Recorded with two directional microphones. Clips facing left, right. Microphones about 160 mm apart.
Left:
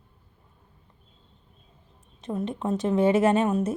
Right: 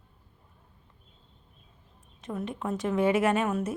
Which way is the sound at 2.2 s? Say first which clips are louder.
Left 4 dB; 25° left (ahead or behind).